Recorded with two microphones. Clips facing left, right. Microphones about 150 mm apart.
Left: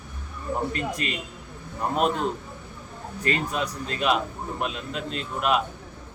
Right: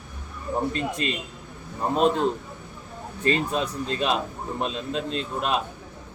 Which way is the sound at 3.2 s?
30° right (ahead or behind).